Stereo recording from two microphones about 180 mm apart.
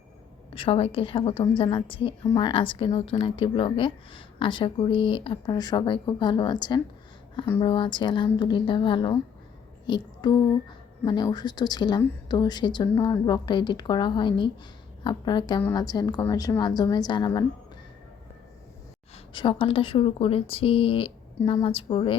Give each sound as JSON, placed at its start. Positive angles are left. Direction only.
{"t": 0.5, "sound": "speech", "side_deg": 30}
{"t": 2.2, "sound": "a woman's voice", "side_deg": 15}
{"t": 2.5, "sound": "speech", "side_deg": 30}
{"t": 19.1, "sound": "speech", "side_deg": 30}